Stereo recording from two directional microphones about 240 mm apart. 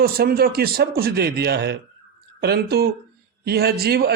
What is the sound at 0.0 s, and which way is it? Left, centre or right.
A man's voice, right.